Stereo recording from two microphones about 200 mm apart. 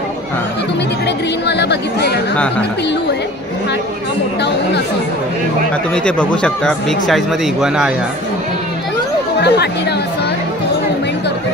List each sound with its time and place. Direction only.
1.0 s speech: 60° left (ahead or behind)
6.0 s speech: 5° left (ahead or behind)
9.4 s speech: 55° left (ahead or behind)